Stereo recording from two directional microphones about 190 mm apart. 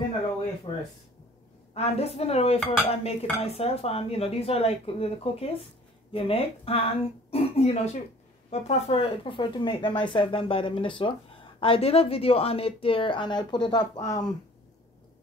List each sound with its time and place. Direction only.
0.7 s speech: 30° left (ahead or behind)
1.7 s dishes: 35° left (ahead or behind)
6.1 s speech: 30° left (ahead or behind)